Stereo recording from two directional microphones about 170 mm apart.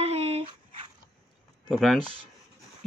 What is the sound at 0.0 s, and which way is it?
Dog, 35° right (ahead or behind).